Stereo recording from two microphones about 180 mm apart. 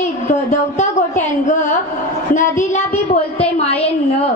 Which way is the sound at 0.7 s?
40° left (ahead or behind).